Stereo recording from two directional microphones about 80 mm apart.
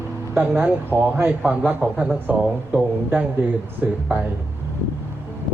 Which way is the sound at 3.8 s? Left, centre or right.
Centre.